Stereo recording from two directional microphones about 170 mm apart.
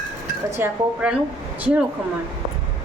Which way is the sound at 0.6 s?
5° right (ahead or behind).